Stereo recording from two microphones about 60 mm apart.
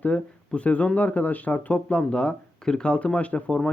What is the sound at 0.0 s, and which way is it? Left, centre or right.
Speech, left.